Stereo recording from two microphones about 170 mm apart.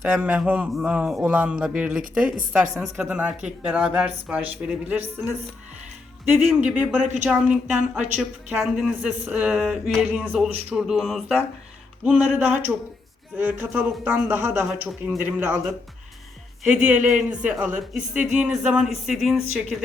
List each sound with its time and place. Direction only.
0.0 s speech: 5° right (ahead or behind)
6.5 s speech: 5° right (ahead or behind)
7.0 s a woman's voice: 45° right (ahead or behind)
7.3 s a woman's voice: 5° right (ahead or behind)
16.6 s a woman's voice: 5° right (ahead or behind)